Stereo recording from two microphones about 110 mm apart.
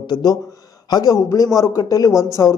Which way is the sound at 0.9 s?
30° left (ahead or behind).